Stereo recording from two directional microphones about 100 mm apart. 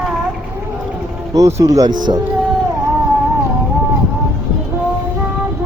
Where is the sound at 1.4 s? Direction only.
30° right (ahead or behind).